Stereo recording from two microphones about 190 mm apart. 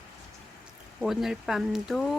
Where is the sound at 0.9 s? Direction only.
Centre (ahead or behind).